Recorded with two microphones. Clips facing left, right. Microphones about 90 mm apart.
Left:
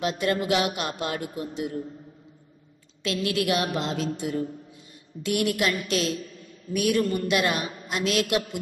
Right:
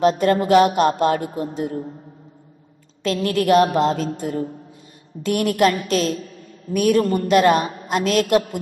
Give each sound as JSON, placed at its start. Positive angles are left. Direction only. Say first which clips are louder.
{"t": 0.0, "sound": "speech", "louder": "right 9 dB", "side_deg": -40}
{"t": 3.0, "sound": "a woman's voice", "louder": "right 6 dB", "side_deg": -45}